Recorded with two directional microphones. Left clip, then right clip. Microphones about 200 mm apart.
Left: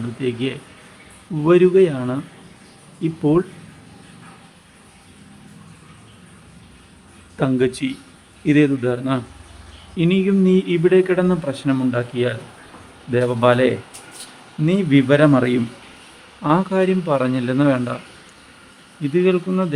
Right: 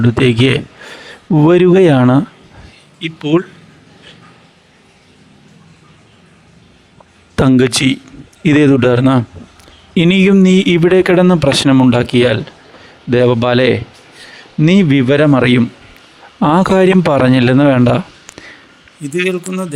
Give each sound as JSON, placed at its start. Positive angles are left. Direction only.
{"t": 0.2, "sound": "speech", "side_deg": -55}
{"t": 3.3, "sound": "speech", "side_deg": -10}
{"t": 7.3, "sound": "speech", "side_deg": -55}
{"t": 16.4, "sound": "speech", "side_deg": -55}
{"t": 19.0, "sound": "speech", "side_deg": 0}